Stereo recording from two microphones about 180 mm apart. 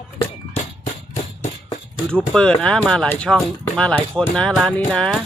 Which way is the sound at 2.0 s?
5° left (ahead or behind).